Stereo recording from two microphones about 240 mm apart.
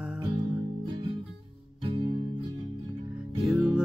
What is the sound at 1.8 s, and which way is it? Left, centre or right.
Music, centre.